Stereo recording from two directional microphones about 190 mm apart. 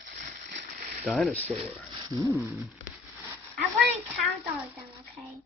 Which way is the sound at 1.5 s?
25° right (ahead or behind).